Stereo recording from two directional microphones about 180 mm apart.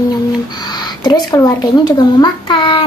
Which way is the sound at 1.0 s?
20° left (ahead or behind).